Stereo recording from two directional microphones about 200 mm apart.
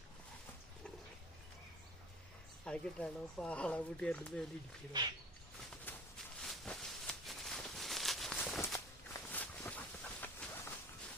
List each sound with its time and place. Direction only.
2.6 s speech: 5° left (ahead or behind)
4.9 s speech: 20° right (ahead or behind)
5.9 s a sound: 10° left (ahead or behind)